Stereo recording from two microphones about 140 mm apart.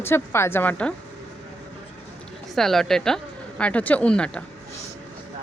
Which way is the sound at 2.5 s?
Centre (ahead or behind).